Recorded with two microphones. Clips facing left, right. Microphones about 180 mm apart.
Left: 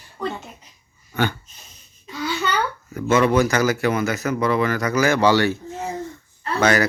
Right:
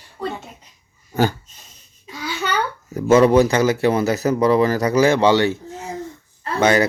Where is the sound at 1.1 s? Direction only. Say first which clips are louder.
Right 4 dB; 40° right (ahead or behind).